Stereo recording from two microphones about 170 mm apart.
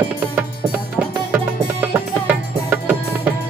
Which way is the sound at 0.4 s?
10° right (ahead or behind).